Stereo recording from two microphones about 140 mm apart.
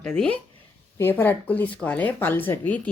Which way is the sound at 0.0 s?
5° left (ahead or behind).